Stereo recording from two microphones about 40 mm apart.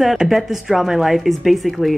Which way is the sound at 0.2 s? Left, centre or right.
Centre.